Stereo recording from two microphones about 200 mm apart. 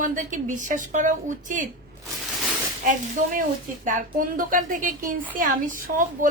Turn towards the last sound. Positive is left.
turn(degrees=-40)  # may be behind; listen again after turning